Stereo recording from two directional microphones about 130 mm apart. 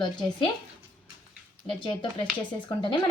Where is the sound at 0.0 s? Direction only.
40° left (ahead or behind).